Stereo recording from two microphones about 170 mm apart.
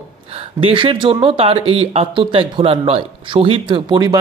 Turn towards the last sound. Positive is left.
turn(degrees=-25)  # may be behind; listen again after turning